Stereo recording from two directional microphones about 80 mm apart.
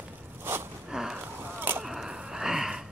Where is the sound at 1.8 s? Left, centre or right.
Centre.